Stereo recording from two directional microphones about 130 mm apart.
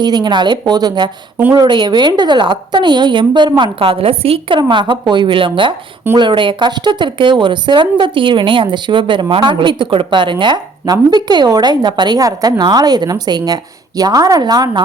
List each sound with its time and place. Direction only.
0.0 s a woman's voice: 35° right (ahead or behind)